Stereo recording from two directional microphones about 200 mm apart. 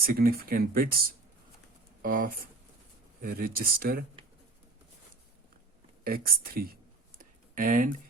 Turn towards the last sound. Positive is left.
turn(degrees=-40)  # may be behind; listen again after turning